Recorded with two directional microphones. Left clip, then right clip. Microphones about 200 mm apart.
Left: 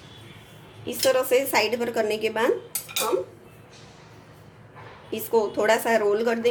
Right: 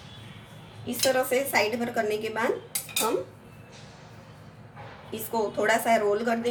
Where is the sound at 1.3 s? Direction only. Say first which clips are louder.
Left 3 dB; 40° left (ahead or behind).